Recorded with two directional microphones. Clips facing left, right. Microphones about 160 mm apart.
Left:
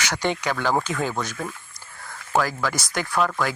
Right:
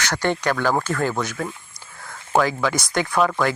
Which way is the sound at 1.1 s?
10° right (ahead or behind).